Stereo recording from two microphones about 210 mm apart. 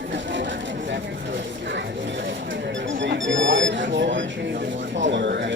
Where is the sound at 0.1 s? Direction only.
60° right (ahead or behind).